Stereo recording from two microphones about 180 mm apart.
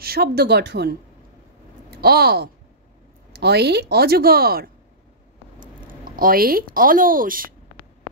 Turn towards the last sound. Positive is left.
turn(degrees=-50)  # may be behind; listen again after turning